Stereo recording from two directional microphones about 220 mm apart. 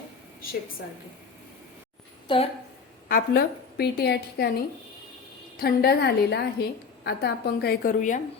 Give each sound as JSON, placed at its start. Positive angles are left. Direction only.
{"t": 2.2, "sound": "a woman's voice", "side_deg": 25}
{"t": 3.1, "sound": "a woman's voice", "side_deg": 40}
{"t": 5.5, "sound": "a woman's voice", "side_deg": 45}